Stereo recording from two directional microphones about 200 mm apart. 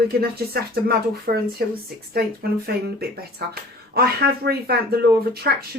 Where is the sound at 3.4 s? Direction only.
55° right (ahead or behind).